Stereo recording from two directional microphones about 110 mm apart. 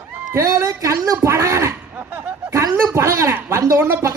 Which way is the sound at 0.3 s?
30° right (ahead or behind).